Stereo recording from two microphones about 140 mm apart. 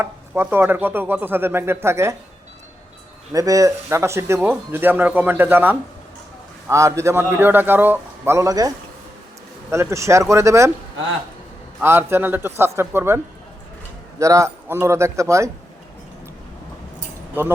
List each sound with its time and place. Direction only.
0.0 s speech: 15° right (ahead or behind)
3.3 s a man's voice: 25° right (ahead or behind)
11.8 s speech: 15° right (ahead or behind)
14.2 s a man's voice: 20° right (ahead or behind)
17.4 s speech: 15° right (ahead or behind)